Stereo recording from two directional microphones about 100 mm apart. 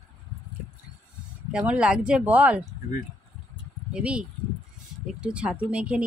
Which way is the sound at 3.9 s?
10° right (ahead or behind).